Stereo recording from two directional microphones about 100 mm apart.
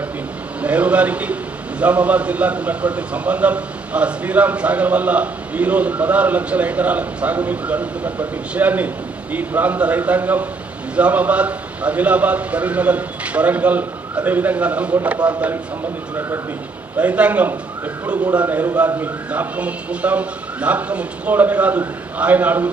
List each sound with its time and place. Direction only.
0.6 s a man's voice: 15° right (ahead or behind)
17.0 s a man's voice: 15° right (ahead or behind)